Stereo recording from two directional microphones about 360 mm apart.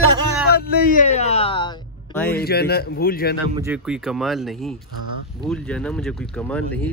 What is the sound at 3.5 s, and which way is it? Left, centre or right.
Speech, centre.